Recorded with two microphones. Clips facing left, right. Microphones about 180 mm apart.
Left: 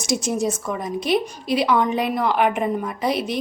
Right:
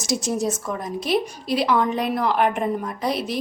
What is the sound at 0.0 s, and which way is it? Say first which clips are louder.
A woman's voice: left 1 dB; centre (ahead or behind).